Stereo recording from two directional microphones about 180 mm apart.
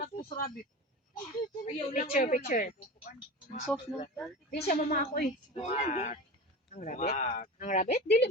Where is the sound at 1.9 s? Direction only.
50° left (ahead or behind).